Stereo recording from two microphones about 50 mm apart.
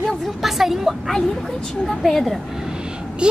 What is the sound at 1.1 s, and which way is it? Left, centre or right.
A woman's voice, centre.